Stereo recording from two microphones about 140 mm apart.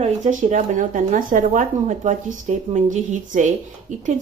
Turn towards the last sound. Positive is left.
turn(degrees=-65)  # may be behind; listen again after turning